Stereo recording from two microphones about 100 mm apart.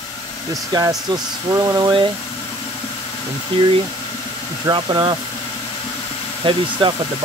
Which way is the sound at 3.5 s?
65° right (ahead or behind).